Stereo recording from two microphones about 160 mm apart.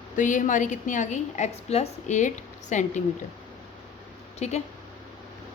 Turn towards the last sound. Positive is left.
turn(degrees=45)  # may be behind; listen again after turning